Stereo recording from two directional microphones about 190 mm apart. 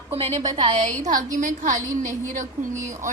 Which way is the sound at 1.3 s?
40° right (ahead or behind).